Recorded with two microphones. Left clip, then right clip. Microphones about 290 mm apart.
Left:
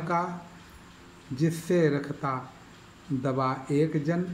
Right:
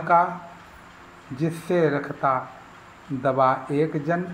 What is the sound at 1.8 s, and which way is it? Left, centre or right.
Speech, right.